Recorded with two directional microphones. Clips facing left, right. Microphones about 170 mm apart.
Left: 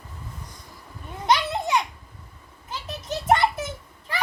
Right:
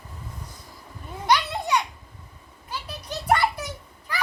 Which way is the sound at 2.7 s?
25° left (ahead or behind).